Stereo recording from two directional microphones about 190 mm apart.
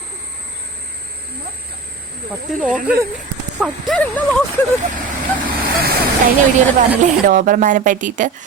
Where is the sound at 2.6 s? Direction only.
5° right (ahead or behind).